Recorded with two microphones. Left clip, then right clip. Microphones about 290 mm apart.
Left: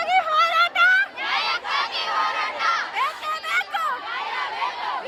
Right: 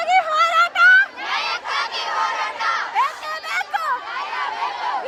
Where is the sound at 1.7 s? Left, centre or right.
Centre.